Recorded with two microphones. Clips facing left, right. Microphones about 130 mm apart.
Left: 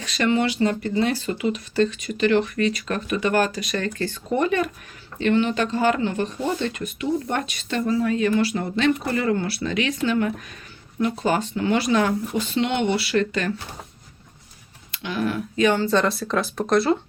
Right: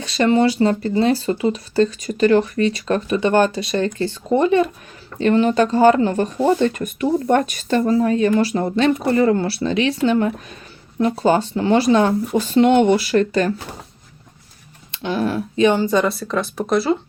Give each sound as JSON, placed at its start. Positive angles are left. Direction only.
{"t": 0.0, "sound": "speech", "side_deg": -30}
{"t": 5.2, "sound": "speech", "side_deg": -40}
{"t": 12.5, "sound": "speech", "side_deg": -45}
{"t": 14.9, "sound": "speech", "side_deg": -30}
{"t": 16.0, "sound": "speech", "side_deg": 0}